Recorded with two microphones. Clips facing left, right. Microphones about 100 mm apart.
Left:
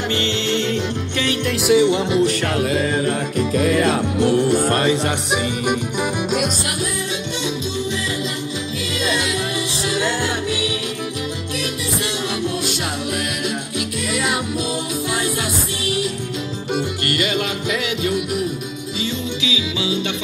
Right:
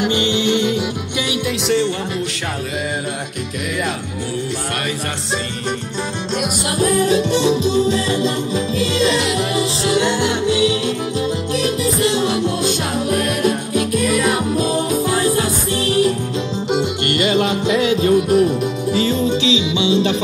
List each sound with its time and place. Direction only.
0.0 s music: 15° right (ahead or behind)
1.7 s music: 15° left (ahead or behind)
6.8 s music: 45° right (ahead or behind)
16.7 s music: 30° right (ahead or behind)
19.4 s music: 30° right (ahead or behind)